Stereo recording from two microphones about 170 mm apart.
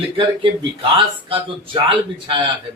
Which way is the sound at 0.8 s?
30° right (ahead or behind).